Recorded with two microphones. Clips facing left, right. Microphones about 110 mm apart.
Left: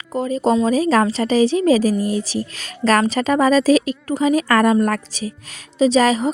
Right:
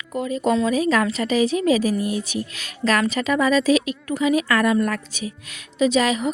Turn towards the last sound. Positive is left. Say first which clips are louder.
# left 4 dB
turn(degrees=35)  # may be behind; listen again after turning